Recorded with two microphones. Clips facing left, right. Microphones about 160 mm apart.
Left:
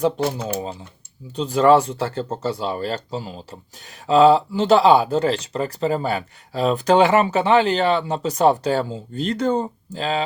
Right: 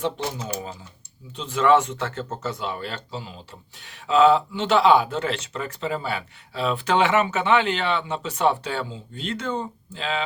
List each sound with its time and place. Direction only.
0.6 s speech: 30° left (ahead or behind)